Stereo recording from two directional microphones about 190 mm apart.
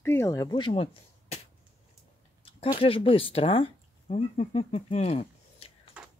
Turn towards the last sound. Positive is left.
turn(degrees=30)  # may be behind; listen again after turning